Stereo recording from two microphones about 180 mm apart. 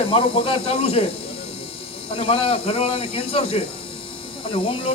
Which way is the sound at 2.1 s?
30° left (ahead or behind).